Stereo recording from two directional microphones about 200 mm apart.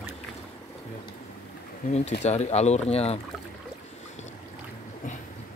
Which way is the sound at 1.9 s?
35° left (ahead or behind).